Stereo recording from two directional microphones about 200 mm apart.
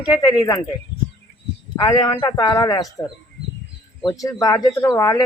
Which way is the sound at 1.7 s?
20° left (ahead or behind).